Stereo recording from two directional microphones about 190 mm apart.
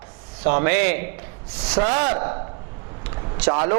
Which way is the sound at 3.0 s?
25° right (ahead or behind).